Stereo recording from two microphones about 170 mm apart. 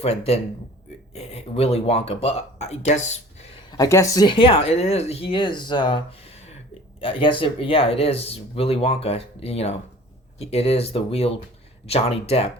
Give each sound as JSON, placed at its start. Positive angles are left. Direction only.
{"t": 0.0, "sound": "speech", "side_deg": 40}
{"t": 3.7, "sound": "speech", "side_deg": 20}
{"t": 7.0, "sound": "speech", "side_deg": 30}